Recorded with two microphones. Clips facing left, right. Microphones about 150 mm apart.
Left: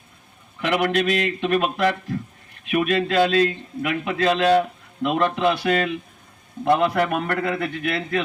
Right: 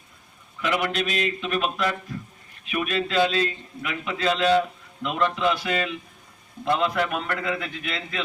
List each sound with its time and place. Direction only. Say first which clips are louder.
0.6 s a man's voice: left 5 dB; 60° left (ahead or behind)